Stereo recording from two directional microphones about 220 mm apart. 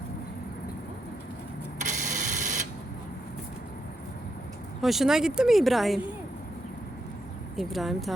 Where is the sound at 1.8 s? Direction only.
35° right (ahead or behind).